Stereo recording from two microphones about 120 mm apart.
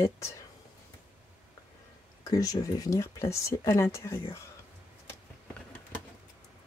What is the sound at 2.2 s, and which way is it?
Speech, 30° left (ahead or behind).